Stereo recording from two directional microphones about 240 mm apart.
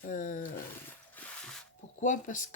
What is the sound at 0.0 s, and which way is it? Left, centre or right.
Roaring cats, left.